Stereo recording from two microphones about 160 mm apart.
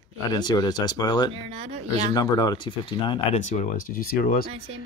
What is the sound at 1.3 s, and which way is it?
Speech, 35° right (ahead or behind).